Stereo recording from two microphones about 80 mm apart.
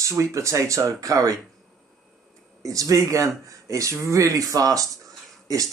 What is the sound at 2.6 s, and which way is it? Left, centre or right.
Speech, right.